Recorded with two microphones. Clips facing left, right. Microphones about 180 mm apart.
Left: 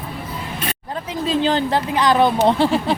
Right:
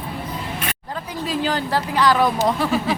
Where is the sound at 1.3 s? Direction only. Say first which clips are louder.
Left 4 dB; 25° left (ahead or behind).